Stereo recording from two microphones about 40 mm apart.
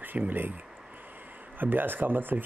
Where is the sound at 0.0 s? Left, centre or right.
Right.